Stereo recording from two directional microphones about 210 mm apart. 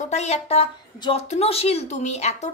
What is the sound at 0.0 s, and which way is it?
A woman's voice, 30° left (ahead or behind).